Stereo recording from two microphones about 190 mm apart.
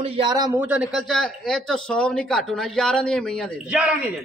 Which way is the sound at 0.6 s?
5° right (ahead or behind).